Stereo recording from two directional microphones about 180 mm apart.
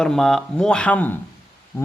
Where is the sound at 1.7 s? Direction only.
10° left (ahead or behind).